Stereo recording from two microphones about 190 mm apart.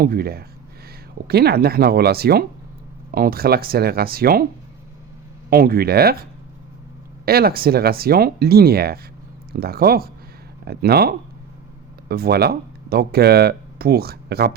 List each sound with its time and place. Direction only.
0.0 s speech: 50° right (ahead or behind)
5.5 s speech: 55° right (ahead or behind)
7.3 s speech: 55° right (ahead or behind)